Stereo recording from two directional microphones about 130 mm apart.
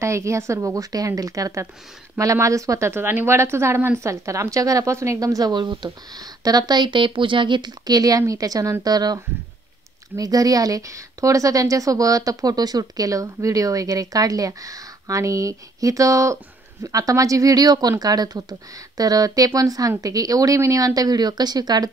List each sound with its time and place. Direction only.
0.0 s speech: 20° right (ahead or behind)